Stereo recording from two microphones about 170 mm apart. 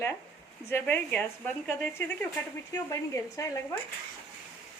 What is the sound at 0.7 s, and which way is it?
A woman's voice, 10° left (ahead or behind).